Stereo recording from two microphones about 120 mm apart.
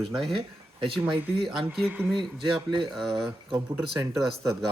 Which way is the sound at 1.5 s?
Centre (ahead or behind).